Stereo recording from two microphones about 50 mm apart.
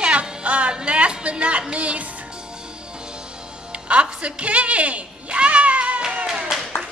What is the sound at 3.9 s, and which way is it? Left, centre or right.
A woman's voice, right.